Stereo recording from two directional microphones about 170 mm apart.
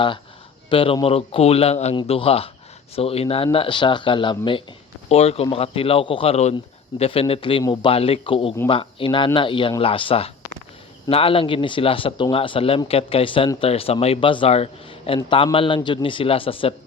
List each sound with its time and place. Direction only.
0.7 s speech: 30° left (ahead or behind)